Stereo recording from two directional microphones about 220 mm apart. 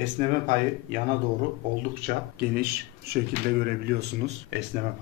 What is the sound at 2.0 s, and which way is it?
Speech, 45° right (ahead or behind).